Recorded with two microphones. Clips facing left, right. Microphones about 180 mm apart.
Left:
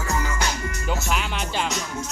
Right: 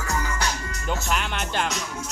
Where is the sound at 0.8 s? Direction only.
5° left (ahead or behind).